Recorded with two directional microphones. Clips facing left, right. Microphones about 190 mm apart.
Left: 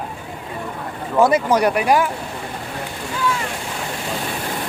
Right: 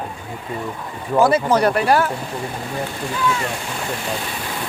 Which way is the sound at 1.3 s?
15° left (ahead or behind).